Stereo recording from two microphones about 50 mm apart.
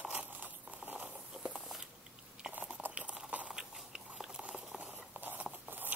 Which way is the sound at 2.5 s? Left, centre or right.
Right.